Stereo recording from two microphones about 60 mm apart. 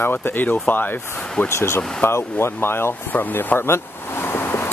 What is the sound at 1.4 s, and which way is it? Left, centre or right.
Speech, left.